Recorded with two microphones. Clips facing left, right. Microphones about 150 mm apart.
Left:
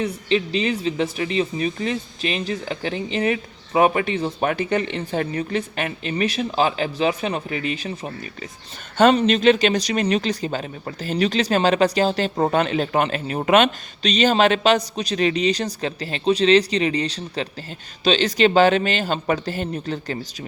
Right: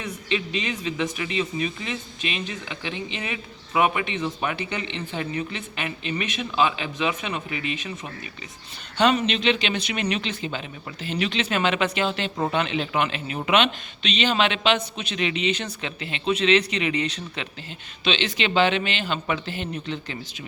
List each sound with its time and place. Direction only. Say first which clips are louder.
0.0 s speech: left 7 dB; 35° left (ahead or behind)
9.1 s speech: left 7 dB; 45° left (ahead or behind)